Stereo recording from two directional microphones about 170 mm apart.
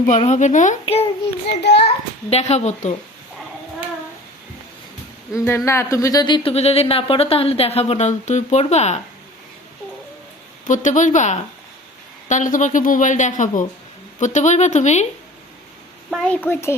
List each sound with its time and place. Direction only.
0.2 s a woman's voice: 45° left (ahead or behind)
1.5 s a child's voice: 85° left
2.3 s speech: 40° left (ahead or behind)
5.5 s speech: 15° left (ahead or behind); by 9.0 s 40° left (ahead or behind)
10.7 s a woman's voice: 45° left (ahead or behind)
16.0 s a woman's voice: 5° left (ahead or behind)